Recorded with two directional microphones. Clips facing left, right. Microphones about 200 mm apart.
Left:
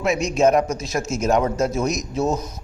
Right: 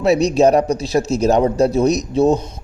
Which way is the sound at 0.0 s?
35° right (ahead or behind).